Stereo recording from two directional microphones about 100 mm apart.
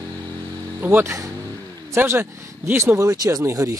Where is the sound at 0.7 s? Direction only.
25° right (ahead or behind).